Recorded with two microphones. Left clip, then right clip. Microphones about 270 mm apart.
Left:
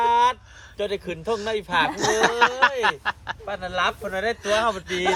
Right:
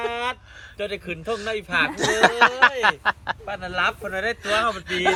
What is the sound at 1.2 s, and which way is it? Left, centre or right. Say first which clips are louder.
Speech: left 2 dB; centre.